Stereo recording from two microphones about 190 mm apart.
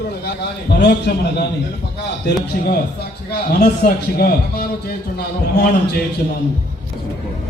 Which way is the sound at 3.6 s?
55° left (ahead or behind).